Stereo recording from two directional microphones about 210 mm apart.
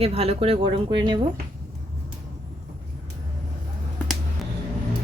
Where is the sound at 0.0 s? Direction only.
30° right (ahead or behind).